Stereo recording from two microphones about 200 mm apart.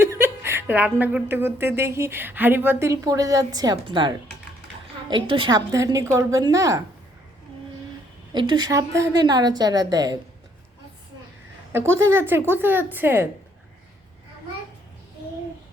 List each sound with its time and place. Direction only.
0.0 s a woman's voice: 15° right (ahead or behind)
8.3 s a woman's voice: 20° right (ahead or behind)
11.7 s a woman's voice: 15° right (ahead or behind)